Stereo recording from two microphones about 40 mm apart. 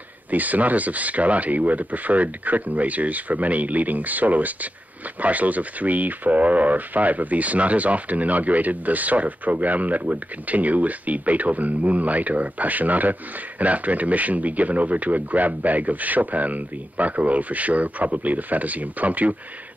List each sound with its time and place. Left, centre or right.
0.3 s speech: right